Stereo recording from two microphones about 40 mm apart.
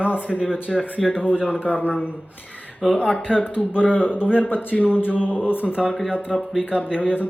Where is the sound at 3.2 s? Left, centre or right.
Centre.